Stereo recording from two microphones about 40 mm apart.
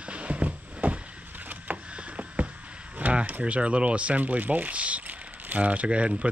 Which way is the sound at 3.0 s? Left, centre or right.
Right.